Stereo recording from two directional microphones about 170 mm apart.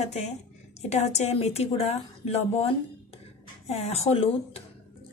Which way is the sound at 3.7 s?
40° left (ahead or behind).